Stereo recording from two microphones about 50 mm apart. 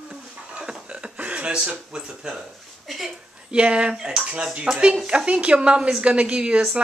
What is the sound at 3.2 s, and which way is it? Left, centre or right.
A woman's voice, centre.